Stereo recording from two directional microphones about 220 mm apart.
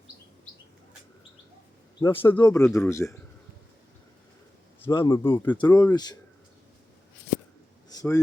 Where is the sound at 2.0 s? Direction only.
20° left (ahead or behind).